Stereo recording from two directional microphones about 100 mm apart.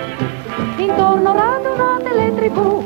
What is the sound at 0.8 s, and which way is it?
Music, 25° left (ahead or behind).